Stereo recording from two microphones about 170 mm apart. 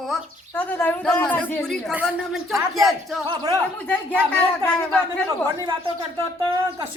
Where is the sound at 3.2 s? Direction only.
25° right (ahead or behind).